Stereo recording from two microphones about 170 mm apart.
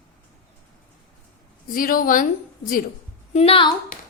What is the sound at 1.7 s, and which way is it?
Speech, 55° left (ahead or behind).